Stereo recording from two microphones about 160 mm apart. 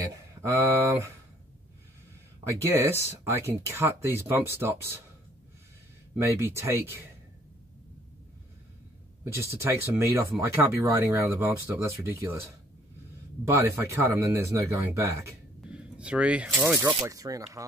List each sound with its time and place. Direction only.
0.1 s speech: 20° right (ahead or behind)
2.4 s speech: 15° right (ahead or behind)
6.1 s speech: 15° right (ahead or behind)
9.3 s speech: 15° right (ahead or behind)
13.6 s speech: 20° right (ahead or behind)
15.6 s speech: 5° right (ahead or behind)